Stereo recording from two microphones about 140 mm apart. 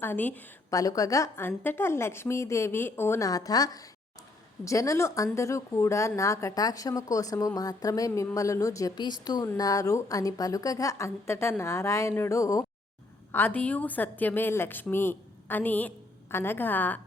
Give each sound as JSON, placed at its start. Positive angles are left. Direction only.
{"t": 0.0, "sound": "a woman's voice", "side_deg": 15}
{"t": 0.7, "sound": "a woman's voice", "side_deg": 25}